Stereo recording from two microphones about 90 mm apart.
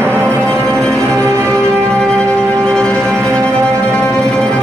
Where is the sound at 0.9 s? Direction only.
35° right (ahead or behind).